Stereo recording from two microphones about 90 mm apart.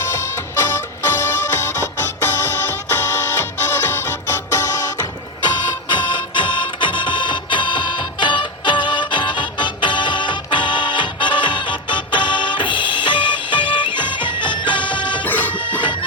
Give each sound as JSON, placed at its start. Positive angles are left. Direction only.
{"t": 0.0, "sound": "music", "side_deg": 30}
{"t": 4.9, "sound": "music", "side_deg": 55}
{"t": 15.2, "sound": "music", "side_deg": 20}
{"t": 15.8, "sound": "music", "side_deg": 60}